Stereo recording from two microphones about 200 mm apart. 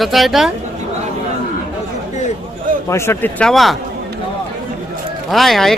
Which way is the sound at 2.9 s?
15° left (ahead or behind).